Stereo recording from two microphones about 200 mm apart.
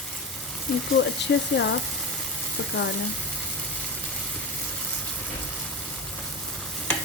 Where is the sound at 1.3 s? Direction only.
60° left (ahead or behind).